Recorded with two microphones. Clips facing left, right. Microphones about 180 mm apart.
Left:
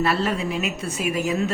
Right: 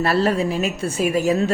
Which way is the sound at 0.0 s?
35° right (ahead or behind).